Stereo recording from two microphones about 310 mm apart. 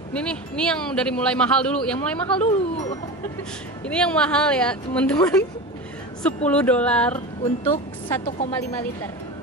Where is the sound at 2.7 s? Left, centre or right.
Left.